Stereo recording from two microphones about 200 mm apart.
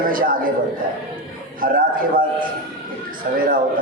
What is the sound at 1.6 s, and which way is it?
Speech, 45° right (ahead or behind).